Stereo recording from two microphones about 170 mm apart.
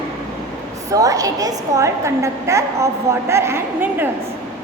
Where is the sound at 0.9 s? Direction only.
20° right (ahead or behind).